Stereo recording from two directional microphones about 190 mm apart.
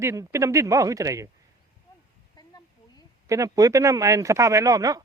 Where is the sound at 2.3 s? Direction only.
20° left (ahead or behind).